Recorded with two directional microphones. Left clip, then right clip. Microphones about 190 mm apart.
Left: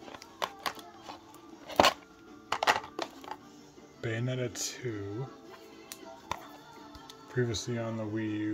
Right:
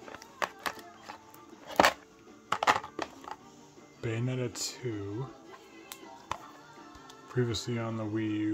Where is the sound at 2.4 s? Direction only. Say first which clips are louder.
Right 1 dB; 15° right (ahead or behind).